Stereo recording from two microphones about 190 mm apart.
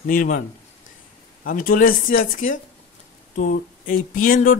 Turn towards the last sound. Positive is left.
turn(degrees=45)  # may be behind; listen again after turning